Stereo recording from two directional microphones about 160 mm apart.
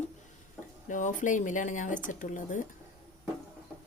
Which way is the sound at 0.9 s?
50° left (ahead or behind).